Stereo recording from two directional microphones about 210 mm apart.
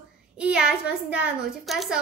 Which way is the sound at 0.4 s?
5° right (ahead or behind).